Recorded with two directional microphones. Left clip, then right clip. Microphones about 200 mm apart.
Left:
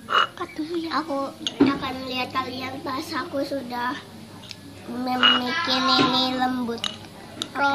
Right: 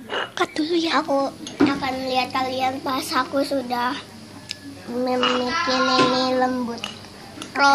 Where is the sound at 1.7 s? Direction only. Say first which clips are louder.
Right 5 dB; 55° right (ahead or behind).